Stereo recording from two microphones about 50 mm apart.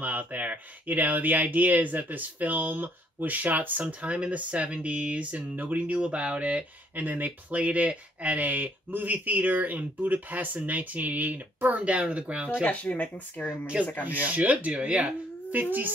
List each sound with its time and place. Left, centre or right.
0.0 s speech: right
5.9 s speech: right
7.0 s speech: right
12.6 s speech: left
13.5 s speech: centre
14.0 s speech: right